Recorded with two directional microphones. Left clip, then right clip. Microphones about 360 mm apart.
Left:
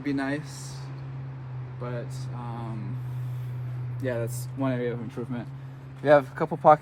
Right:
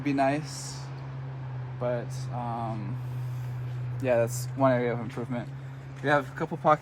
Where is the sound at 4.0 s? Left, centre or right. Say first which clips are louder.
Right 6 dB; centre.